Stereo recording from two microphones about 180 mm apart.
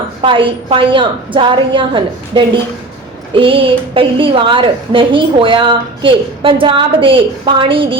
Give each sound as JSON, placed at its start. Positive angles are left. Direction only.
{"t": 0.2, "sound": "a woman's voice", "side_deg": -30}